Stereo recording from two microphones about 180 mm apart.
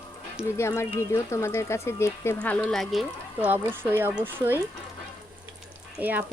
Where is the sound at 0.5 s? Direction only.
15° left (ahead or behind); by 4.6 s 10° right (ahead or behind).